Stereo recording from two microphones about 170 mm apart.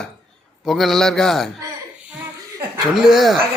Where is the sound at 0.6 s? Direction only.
Centre (ahead or behind).